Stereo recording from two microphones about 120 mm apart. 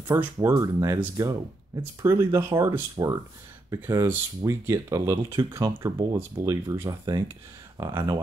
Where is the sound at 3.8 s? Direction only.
20° right (ahead or behind).